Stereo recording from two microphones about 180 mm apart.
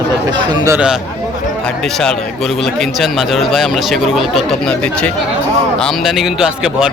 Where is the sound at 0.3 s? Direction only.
20° right (ahead or behind).